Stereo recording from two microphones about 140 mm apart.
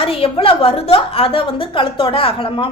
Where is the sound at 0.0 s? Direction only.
40° left (ahead or behind).